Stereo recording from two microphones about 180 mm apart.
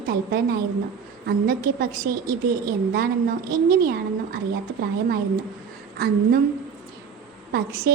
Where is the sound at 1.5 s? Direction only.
50° right (ahead or behind).